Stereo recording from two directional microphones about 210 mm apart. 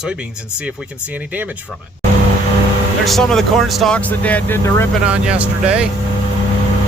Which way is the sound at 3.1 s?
Centre (ahead or behind).